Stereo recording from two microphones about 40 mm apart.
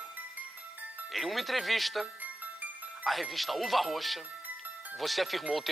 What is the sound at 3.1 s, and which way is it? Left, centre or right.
Speech, centre.